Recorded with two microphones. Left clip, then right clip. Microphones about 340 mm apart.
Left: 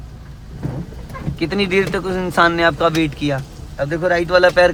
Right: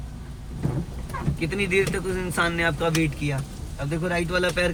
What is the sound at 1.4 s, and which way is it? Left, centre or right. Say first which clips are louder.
Speech: left 6 dB; centre.